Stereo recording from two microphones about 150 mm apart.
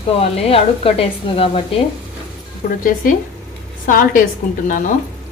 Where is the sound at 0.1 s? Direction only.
40° left (ahead or behind).